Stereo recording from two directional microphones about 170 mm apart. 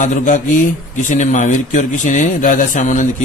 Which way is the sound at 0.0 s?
50° left (ahead or behind).